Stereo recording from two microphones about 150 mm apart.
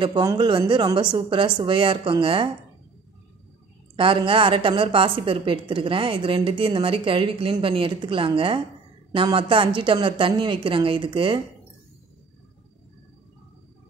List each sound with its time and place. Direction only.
0.0 s a woman's voice: 25° right (ahead or behind)
3.9 s a woman's voice: 35° right (ahead or behind)